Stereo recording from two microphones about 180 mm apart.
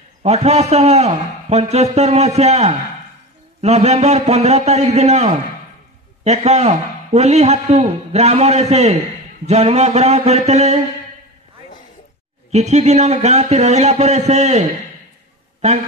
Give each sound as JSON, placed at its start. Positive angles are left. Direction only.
{"t": 0.2, "sound": "a man's voice", "side_deg": -35}
{"t": 12.4, "sound": "a man's voice", "side_deg": -40}